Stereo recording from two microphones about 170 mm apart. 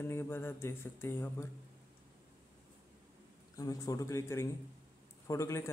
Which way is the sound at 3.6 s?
20° left (ahead or behind).